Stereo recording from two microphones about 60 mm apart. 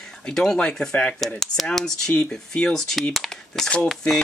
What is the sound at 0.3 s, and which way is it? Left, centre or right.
Speech, centre.